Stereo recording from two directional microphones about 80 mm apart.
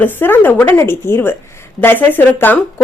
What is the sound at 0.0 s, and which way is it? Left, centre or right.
A woman's voice, left.